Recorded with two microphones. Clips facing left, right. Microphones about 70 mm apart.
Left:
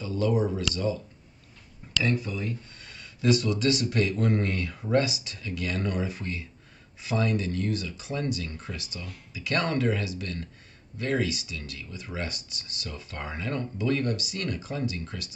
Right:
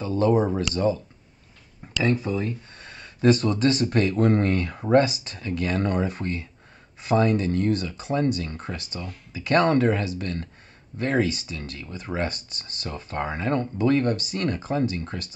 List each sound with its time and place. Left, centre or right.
0.0 s speech: right
2.0 s speech: right